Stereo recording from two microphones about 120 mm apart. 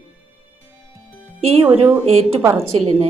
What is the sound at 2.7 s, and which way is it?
Speech, 60° right (ahead or behind).